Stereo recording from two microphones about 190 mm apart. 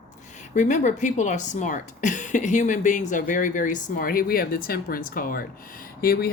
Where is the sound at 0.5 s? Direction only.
40° left (ahead or behind).